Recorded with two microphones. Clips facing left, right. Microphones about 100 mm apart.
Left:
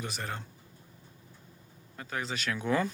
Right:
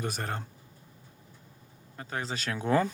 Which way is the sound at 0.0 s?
45° right (ahead or behind).